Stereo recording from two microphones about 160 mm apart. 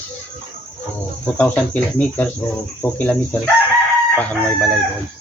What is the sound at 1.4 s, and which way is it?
Speech, 10° left (ahead or behind).